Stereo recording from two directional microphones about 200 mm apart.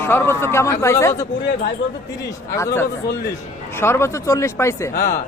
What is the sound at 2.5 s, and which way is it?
Speech, 15° left (ahead or behind).